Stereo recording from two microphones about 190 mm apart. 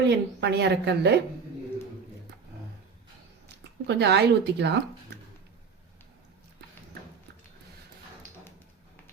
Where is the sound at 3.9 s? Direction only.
65° right (ahead or behind).